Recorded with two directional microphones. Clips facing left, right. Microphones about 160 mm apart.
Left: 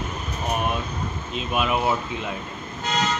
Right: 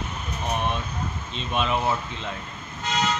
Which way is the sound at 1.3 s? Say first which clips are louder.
Left 2 dB; 5° left (ahead or behind).